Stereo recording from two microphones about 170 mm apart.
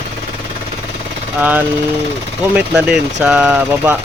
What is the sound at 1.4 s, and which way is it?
Speech, 10° right (ahead or behind).